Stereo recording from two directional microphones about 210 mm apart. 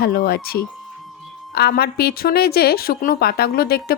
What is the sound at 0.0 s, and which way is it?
A woman's voice, 45° left (ahead or behind).